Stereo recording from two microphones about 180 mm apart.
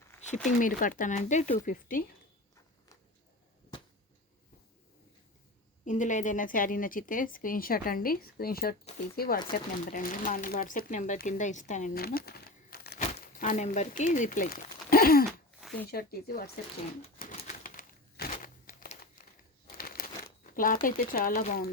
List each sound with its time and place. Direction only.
0.1 s a sound: 15° left (ahead or behind)
0.6 s speech: 50° left (ahead or behind)
5.8 s speech: 45° left (ahead or behind)
13.0 s crumpling: 40° left (ahead or behind)
15.3 s a sound: 5° left (ahead or behind)
15.9 s speech: 55° left (ahead or behind)
17.3 s crumpling: 45° left (ahead or behind)
20.5 s speech: 50° left (ahead or behind)